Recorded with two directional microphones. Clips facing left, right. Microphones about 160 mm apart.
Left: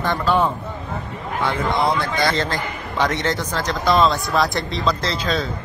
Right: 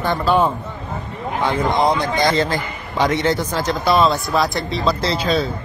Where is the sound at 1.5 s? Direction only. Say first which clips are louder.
Right 3 dB; 15° right (ahead or behind).